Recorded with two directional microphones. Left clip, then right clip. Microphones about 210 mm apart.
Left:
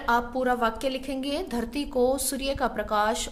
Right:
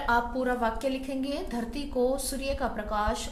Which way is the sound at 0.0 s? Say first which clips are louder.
Left 2 dB; 35° left (ahead or behind).